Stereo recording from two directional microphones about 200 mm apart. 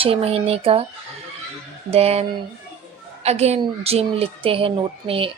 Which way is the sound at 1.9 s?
30° right (ahead or behind).